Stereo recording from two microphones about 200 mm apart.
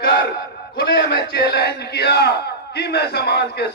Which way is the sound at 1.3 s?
50° left (ahead or behind).